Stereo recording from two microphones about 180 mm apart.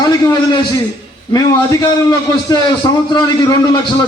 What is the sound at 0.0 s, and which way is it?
A man's voice, 25° left (ahead or behind).